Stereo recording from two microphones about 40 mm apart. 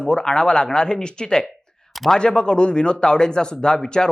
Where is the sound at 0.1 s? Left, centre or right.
Centre.